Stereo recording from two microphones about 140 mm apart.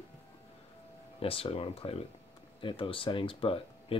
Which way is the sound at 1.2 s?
45° left (ahead or behind).